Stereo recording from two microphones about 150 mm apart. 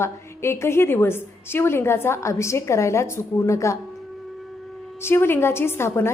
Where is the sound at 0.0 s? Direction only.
15° left (ahead or behind).